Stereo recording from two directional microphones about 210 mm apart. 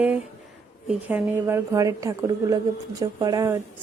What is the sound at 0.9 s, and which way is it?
Speech, 5° right (ahead or behind).